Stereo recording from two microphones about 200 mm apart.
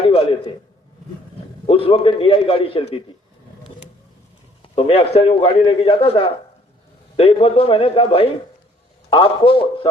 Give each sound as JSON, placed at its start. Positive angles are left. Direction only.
{"t": 0.0, "sound": "a sound", "side_deg": 30}
{"t": 1.6, "sound": "a man's voice", "side_deg": 25}
{"t": 4.7, "sound": "a man's voice", "side_deg": 30}